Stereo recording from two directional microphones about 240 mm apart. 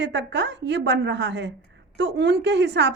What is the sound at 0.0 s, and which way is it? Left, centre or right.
A woman's voice, right.